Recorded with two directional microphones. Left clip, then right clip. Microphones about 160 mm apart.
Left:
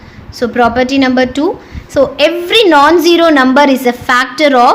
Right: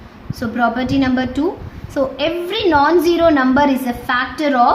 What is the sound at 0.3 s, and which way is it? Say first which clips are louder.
A woman's voice: left 7 dB; 45° left (ahead or behind).